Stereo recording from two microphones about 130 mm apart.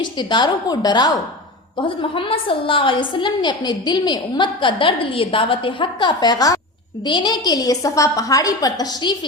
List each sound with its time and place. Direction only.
0.0 s a woman's voice: 35° left (ahead or behind)